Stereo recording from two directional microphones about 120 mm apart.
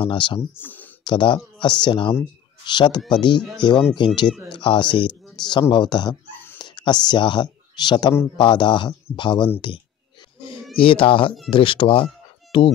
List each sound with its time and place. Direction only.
0.0 s speech: 40° left (ahead or behind)
0.4 s speech: 15° left (ahead or behind)
1.0 s a man's voice: 40° left (ahead or behind)
3.3 s speech: 5° left (ahead or behind)
3.9 s a man's voice: 40° left (ahead or behind)
6.2 s a sound: 15° left (ahead or behind)
6.6 s a man's voice: 40° left (ahead or behind)
10.8 s speech: 50° left (ahead or behind)